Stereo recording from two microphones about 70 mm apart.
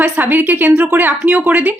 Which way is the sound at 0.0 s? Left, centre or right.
Right.